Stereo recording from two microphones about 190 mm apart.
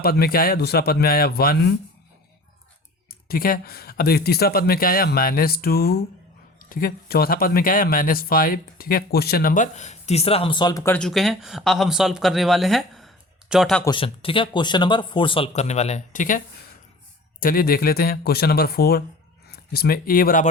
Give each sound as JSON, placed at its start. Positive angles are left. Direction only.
{"t": 0.0, "sound": "speech", "side_deg": 55}
{"t": 3.2, "sound": "speech", "side_deg": 50}
{"t": 10.9, "sound": "speech", "side_deg": 0}
{"t": 13.8, "sound": "speech", "side_deg": 25}
{"t": 17.4, "sound": "speech", "side_deg": 50}